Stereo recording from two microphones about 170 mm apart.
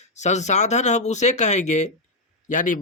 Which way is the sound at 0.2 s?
45° left (ahead or behind).